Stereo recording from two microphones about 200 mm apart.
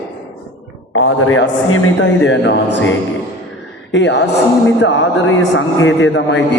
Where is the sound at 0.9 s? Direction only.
90° left.